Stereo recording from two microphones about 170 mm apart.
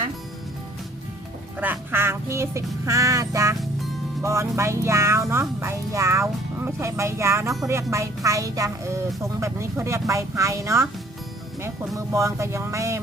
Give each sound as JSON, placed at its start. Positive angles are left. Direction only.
{"t": 1.6, "sound": "music", "side_deg": -10}
{"t": 7.7, "sound": "a woman's voice", "side_deg": -15}
{"t": 9.4, "sound": "music", "side_deg": -15}